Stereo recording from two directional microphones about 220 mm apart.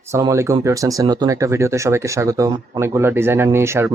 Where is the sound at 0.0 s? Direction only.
15° right (ahead or behind).